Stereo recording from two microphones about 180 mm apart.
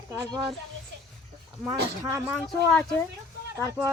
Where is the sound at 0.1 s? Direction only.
20° right (ahead or behind).